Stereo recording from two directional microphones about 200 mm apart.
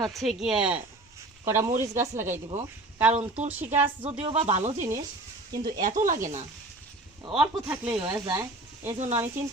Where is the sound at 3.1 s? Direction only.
35° right (ahead or behind).